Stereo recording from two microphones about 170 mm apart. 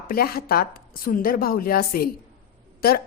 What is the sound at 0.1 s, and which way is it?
Speech, 65° left (ahead or behind).